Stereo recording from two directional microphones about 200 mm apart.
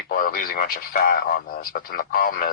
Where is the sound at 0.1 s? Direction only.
45° left (ahead or behind).